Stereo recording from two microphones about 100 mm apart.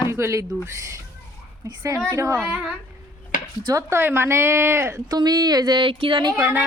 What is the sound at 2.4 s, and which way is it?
Speech, 10° right (ahead or behind).